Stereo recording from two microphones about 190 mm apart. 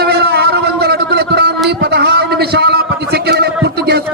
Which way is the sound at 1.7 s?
60° right (ahead or behind).